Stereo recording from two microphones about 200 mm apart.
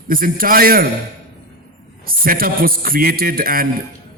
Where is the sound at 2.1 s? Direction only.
45° right (ahead or behind).